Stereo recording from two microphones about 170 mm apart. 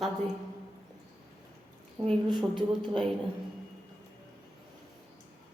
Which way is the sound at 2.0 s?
25° right (ahead or behind).